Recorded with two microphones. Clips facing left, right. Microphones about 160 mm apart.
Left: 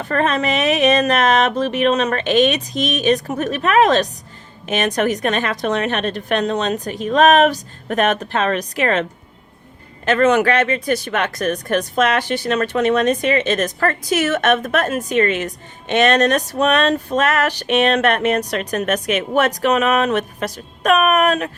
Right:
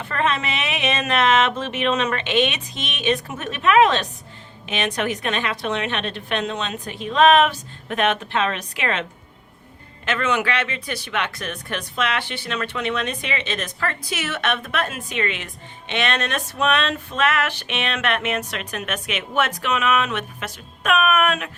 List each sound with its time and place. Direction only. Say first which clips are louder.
0.0 s speech: left 5 dB; 40° left (ahead or behind)
10.1 s speech: left 8 dB; 45° left (ahead or behind)